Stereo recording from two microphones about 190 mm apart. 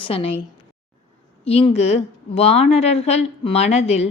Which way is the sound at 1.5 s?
30° left (ahead or behind).